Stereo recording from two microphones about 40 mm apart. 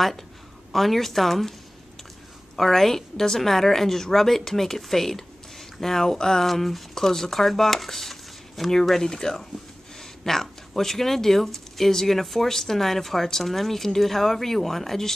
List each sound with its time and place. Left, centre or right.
0.7 s speech: centre
2.5 s speech: centre